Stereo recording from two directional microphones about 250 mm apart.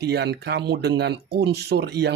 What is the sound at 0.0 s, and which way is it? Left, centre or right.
Speech, right.